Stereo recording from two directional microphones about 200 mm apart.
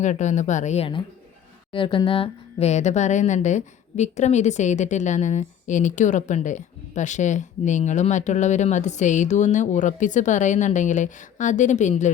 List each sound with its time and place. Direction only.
0.0 s speech: 35° left (ahead or behind)